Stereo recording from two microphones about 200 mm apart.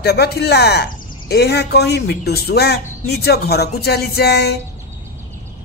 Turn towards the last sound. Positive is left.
turn(degrees=55)  # may be behind; listen again after turning